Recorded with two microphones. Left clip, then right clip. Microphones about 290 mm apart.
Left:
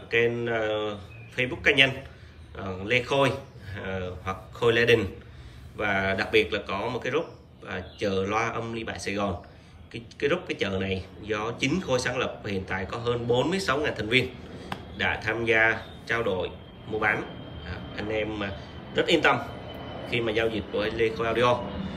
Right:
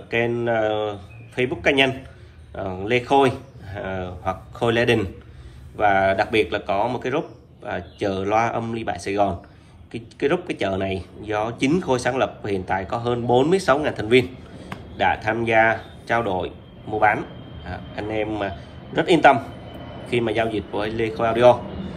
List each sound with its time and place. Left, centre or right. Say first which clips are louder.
0.1 s a man's voice: right 3 dB; centre